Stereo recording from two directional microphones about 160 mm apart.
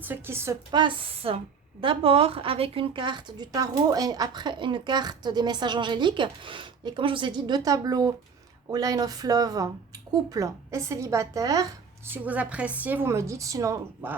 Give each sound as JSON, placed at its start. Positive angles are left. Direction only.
{"t": 0.0, "sound": "a woman's voice", "side_deg": -15}
{"t": 0.7, "sound": "a woman's voice", "side_deg": -30}
{"t": 12.1, "sound": "a woman's voice", "side_deg": -10}